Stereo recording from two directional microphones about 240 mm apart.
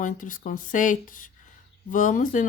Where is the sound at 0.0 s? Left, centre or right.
Left.